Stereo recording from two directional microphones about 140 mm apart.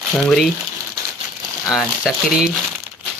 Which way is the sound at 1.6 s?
5° right (ahead or behind).